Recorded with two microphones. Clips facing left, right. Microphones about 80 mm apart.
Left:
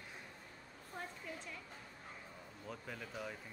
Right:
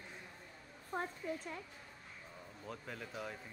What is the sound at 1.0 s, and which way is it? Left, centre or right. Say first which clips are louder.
Speech: right 7 dB; right.